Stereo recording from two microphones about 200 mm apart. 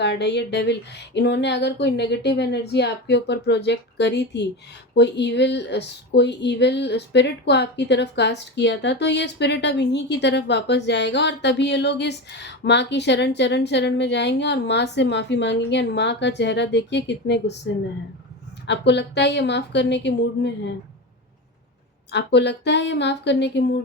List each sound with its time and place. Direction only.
0.0 s speech: 60° left (ahead or behind)
22.1 s speech: 60° left (ahead or behind)